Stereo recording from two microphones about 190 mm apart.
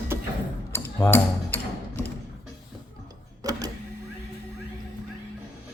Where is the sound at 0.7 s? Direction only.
10° left (ahead or behind).